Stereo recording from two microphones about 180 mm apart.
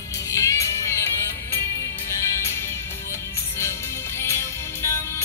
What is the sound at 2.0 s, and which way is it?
Music, 15° left (ahead or behind).